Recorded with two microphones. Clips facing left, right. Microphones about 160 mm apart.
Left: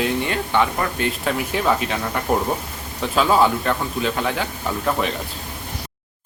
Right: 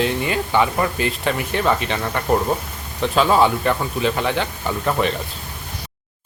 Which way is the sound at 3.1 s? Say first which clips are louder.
Right 1 dB; centre (ahead or behind).